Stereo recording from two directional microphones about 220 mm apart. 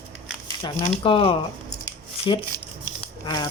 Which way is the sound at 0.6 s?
15° left (ahead or behind).